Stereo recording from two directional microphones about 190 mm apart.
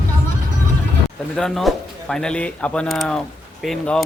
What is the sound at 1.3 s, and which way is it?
Speech, centre (ahead or behind).